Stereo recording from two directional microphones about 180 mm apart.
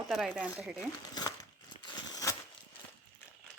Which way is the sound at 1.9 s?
20° left (ahead or behind).